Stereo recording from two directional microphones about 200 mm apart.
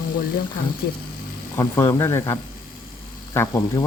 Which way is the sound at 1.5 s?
15° left (ahead or behind).